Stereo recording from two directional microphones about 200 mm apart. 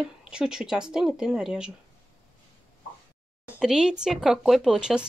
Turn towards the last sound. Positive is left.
turn(degrees=-5)  # may be behind; listen again after turning